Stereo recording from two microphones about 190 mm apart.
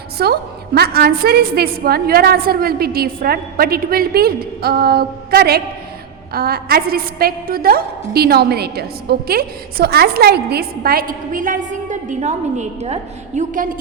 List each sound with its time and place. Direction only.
0.2 s a woman's voice: 55° right (ahead or behind)